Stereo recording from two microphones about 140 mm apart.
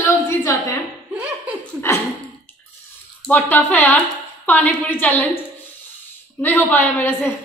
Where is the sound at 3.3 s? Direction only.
15° left (ahead or behind).